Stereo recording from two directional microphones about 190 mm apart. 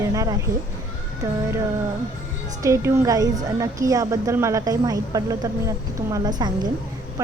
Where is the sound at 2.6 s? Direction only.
15° right (ahead or behind).